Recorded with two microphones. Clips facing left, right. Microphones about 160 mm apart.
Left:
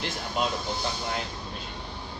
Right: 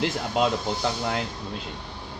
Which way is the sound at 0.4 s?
90° right.